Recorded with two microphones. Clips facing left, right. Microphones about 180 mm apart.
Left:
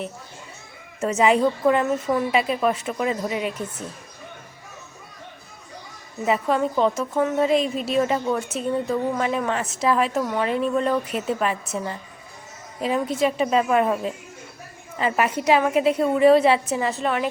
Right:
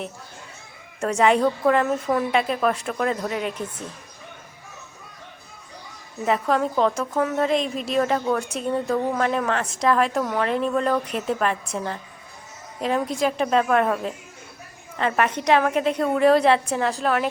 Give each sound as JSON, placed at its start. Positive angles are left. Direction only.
{"t": 0.9, "sound": "a woman's voice", "side_deg": 5}
{"t": 6.2, "sound": "a woman's voice", "side_deg": 0}